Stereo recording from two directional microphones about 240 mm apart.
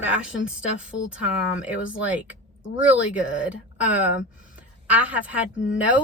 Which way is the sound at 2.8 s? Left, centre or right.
Centre.